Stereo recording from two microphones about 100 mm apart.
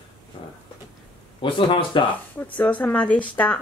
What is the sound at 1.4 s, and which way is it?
Speech, 55° left (ahead or behind).